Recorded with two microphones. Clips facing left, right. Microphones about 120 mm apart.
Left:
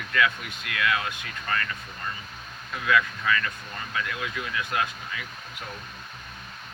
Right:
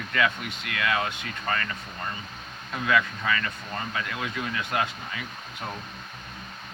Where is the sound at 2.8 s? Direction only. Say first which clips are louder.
Left 1 dB; 25° right (ahead or behind).